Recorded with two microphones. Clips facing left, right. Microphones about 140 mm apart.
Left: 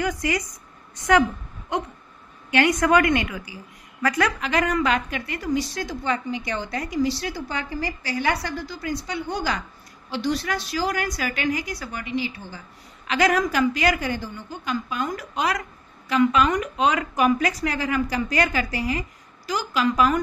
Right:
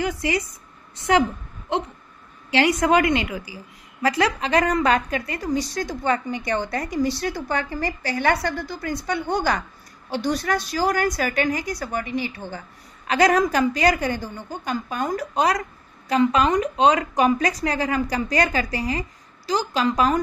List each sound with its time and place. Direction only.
2.8 s a woman's voice: 25° right (ahead or behind); by 12.6 s 55° right (ahead or behind)
13.0 s a woman's voice: 40° right (ahead or behind)